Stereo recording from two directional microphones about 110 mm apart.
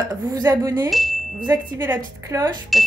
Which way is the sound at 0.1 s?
35° right (ahead or behind).